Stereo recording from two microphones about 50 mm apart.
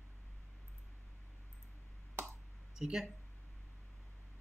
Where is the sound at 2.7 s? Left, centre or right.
Centre.